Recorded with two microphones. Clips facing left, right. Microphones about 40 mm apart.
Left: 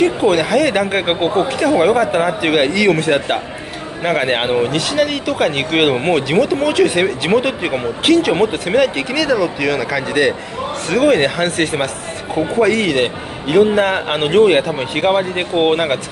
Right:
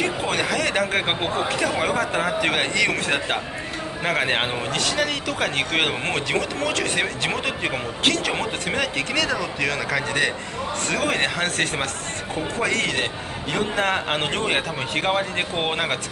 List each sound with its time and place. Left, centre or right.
0.3 s speech: centre
4.4 s speech: centre
4.6 s speech: centre